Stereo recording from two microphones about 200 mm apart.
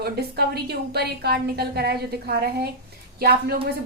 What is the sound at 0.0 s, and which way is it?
A woman's voice, 50° right (ahead or behind).